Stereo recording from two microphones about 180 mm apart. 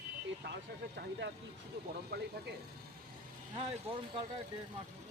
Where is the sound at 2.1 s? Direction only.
60° right (ahead or behind).